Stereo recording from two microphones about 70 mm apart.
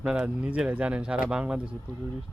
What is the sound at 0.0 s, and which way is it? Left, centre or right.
Speech, centre.